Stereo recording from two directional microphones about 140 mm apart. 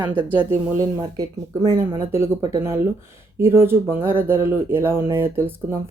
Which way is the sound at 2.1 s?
20° right (ahead or behind).